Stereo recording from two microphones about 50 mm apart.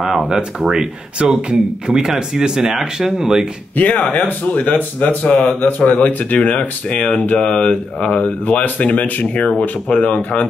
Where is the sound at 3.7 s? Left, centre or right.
Left.